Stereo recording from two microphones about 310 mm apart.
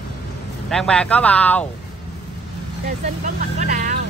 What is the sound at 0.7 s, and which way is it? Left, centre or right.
Speech, centre.